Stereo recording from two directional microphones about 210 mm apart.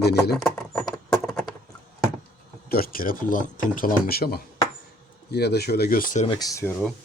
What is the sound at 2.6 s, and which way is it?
Speech, 45° left (ahead or behind).